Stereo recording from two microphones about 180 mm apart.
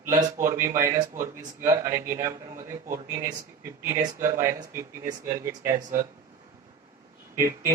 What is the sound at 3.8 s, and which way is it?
Speech, 15° right (ahead or behind).